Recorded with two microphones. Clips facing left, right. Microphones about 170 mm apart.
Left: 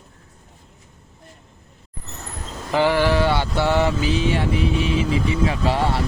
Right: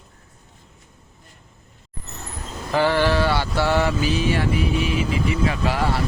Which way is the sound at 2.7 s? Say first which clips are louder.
Left 1 dB; 15° left (ahead or behind).